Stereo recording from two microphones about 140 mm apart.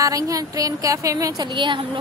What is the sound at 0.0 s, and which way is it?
A woman's voice, 25° right (ahead or behind).